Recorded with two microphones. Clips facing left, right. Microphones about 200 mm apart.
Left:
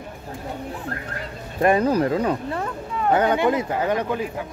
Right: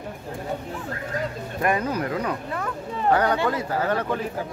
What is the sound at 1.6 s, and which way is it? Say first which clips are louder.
Speech: left 6 dB; 30° left (ahead or behind).